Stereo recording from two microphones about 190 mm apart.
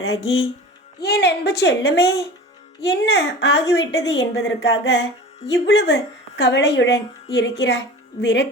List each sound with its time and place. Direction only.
1.0 s a woman's voice: 60° left (ahead or behind)